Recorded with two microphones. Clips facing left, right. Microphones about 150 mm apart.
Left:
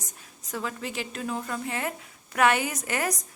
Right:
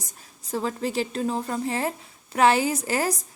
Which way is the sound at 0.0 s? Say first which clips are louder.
Even; 35° right (ahead or behind).